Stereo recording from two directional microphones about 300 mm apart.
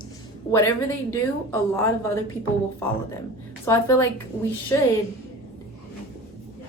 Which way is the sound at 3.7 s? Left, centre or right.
Centre.